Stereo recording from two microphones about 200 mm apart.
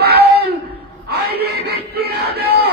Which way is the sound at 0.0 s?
50° right (ahead or behind).